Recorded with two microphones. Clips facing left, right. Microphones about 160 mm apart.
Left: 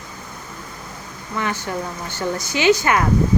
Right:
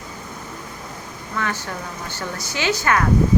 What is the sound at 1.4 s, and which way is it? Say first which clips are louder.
Speech: left 3 dB; 15° left (ahead or behind).